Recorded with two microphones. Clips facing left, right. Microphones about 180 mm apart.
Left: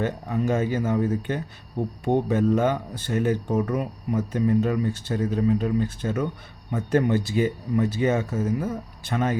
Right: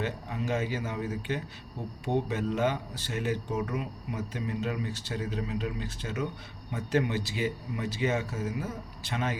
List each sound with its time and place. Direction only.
0.0 s speech: 45° left (ahead or behind)